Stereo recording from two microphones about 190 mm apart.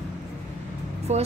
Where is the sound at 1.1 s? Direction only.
35° right (ahead or behind).